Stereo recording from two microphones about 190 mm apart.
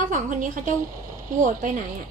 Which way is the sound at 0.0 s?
40° right (ahead or behind).